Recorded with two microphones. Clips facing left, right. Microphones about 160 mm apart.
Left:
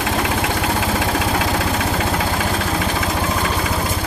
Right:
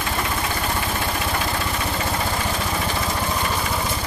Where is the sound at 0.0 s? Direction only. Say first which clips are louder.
Left 5 dB; 90° left.